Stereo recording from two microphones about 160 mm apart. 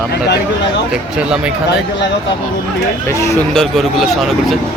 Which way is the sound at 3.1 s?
20° left (ahead or behind).